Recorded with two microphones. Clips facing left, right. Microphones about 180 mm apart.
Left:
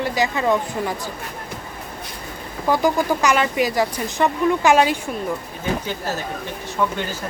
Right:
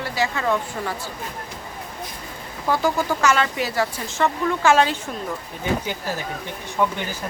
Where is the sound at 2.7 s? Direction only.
15° left (ahead or behind).